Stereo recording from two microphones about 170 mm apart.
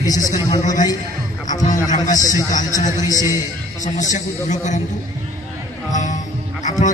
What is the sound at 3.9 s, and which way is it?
Speech, 45° left (ahead or behind).